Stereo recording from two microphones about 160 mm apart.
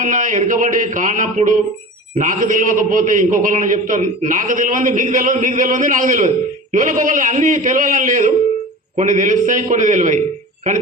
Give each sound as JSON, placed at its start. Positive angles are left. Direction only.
{"t": 0.0, "sound": "a man's voice", "side_deg": -55}